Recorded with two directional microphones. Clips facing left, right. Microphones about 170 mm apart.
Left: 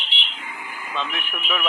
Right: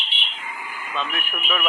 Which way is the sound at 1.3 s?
5° right (ahead or behind).